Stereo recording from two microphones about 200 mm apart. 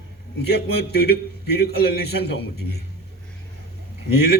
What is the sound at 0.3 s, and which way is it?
A man's voice, 55° left (ahead or behind).